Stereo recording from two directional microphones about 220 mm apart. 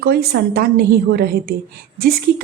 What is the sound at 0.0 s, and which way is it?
A woman's voice, 45° right (ahead or behind).